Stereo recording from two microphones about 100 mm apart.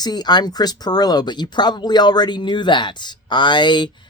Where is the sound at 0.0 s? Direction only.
45° left (ahead or behind).